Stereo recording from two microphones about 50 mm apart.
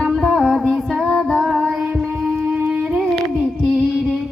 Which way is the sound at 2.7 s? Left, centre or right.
Centre.